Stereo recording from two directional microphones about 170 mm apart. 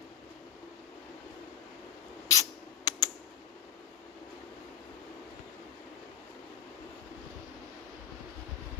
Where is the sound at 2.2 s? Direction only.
20° left (ahead or behind).